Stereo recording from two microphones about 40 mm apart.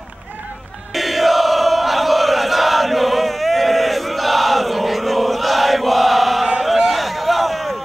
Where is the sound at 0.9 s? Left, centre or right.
Centre.